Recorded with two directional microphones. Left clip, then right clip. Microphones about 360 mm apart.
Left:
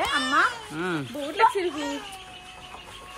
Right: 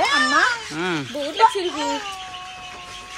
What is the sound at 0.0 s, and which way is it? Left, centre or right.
Babbling, right.